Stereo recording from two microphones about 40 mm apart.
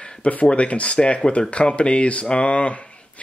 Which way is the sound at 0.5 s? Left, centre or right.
Left.